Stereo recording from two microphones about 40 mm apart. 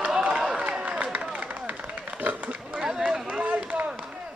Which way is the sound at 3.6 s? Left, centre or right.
Right.